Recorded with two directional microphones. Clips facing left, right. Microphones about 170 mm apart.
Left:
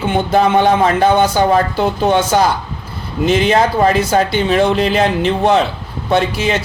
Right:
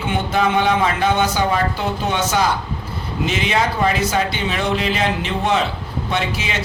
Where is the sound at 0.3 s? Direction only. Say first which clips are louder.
Left 5 dB; 40° left (ahead or behind).